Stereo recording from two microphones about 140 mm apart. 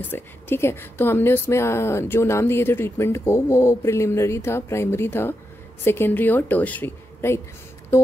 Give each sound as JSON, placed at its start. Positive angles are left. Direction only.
{"t": 0.1, "sound": "a woman's voice", "side_deg": 15}
{"t": 7.9, "sound": "music", "side_deg": 20}